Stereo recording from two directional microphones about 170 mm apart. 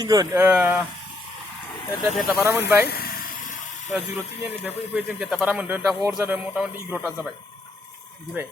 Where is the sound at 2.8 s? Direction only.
65° left (ahead or behind).